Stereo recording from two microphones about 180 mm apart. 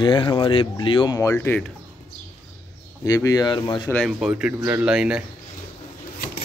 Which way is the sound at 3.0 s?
20° left (ahead or behind).